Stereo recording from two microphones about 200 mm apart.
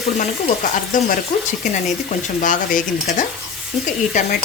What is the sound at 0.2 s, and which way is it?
Speech, 40° left (ahead or behind).